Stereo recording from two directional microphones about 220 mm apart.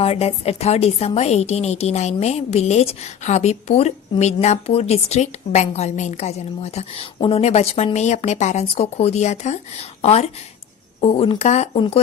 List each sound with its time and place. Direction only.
0.0 s a woman's voice: 25° left (ahead or behind)